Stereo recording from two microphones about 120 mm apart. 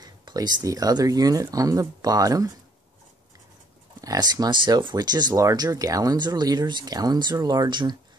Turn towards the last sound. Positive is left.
turn(degrees=-40)  # may be behind; listen again after turning